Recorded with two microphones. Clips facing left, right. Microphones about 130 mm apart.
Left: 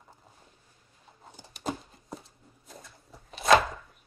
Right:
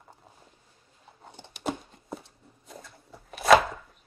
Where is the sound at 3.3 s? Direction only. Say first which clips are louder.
Right 3 dB; 5° right (ahead or behind).